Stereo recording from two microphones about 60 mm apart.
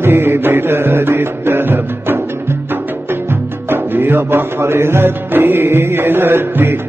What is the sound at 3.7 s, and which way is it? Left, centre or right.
Music, right.